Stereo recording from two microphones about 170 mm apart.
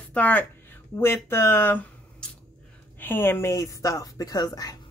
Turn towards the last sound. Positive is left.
turn(degrees=20)  # may be behind; listen again after turning